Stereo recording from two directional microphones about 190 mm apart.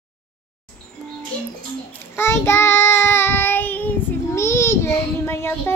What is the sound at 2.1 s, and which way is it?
Child singing, 15° left (ahead or behind).